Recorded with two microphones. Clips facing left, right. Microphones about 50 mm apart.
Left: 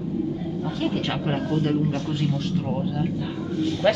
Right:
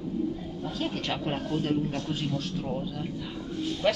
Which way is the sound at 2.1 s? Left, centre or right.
Left.